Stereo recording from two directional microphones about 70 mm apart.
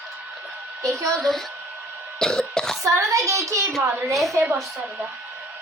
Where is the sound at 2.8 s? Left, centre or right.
Right.